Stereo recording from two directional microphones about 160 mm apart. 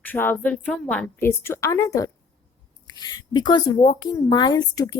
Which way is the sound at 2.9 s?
25° left (ahead or behind).